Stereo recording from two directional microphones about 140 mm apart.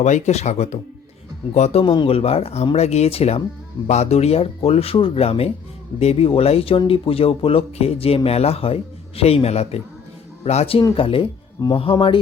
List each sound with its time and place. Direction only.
0.0 s speech: 55° left (ahead or behind)
1.8 s speech: 35° left (ahead or behind)